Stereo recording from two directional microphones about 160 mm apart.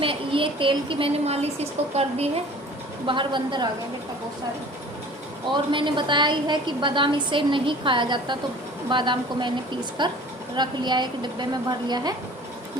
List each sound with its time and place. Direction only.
0.0 s a woman's voice: 35° right (ahead or behind)
3.1 s a woman's voice: 30° right (ahead or behind)
5.5 s a woman's voice: 30° right (ahead or behind)